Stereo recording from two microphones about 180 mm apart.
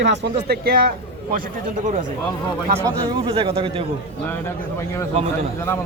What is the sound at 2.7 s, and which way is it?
A man's voice, 30° right (ahead or behind).